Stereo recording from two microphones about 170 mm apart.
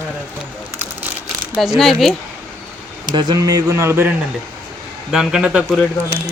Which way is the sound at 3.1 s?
25° right (ahead or behind).